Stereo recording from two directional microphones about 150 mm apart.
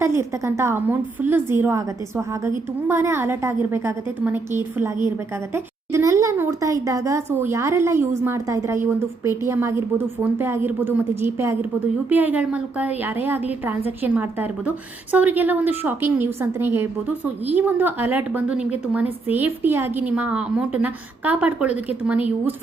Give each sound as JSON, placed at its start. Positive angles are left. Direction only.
{"t": 0.0, "sound": "a woman's voice", "side_deg": -20}